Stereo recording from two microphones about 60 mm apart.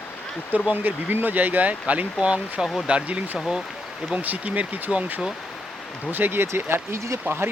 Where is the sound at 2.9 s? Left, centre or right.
Centre; by 7.2 s right.